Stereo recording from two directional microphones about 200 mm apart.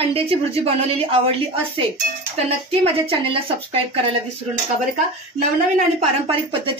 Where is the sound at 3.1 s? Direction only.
25° right (ahead or behind).